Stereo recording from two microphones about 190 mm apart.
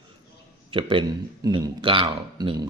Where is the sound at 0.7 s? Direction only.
25° right (ahead or behind).